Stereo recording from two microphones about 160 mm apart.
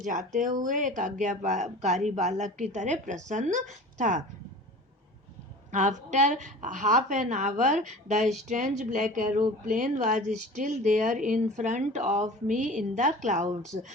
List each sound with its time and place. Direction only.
0.0 s speech: 55° right (ahead or behind)
5.7 s speech: 50° right (ahead or behind)